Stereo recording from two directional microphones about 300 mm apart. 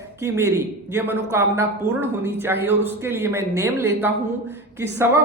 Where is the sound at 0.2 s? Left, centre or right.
Centre.